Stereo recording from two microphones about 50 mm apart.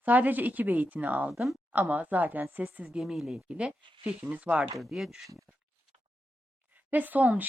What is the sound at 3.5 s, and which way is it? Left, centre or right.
Speech, right.